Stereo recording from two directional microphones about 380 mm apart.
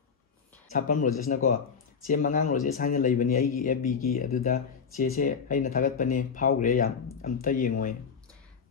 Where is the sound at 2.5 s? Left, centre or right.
Left.